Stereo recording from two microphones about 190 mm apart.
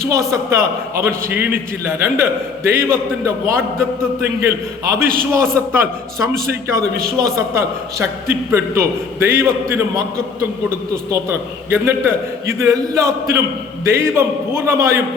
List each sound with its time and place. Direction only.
0.1 s a man's voice: 15° right (ahead or behind)
11.1 s a man's voice: 15° right (ahead or behind)